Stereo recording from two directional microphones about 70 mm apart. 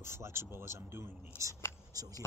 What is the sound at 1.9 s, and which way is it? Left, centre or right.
Speech, right.